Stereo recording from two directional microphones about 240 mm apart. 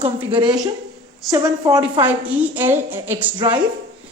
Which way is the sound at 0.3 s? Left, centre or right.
Centre.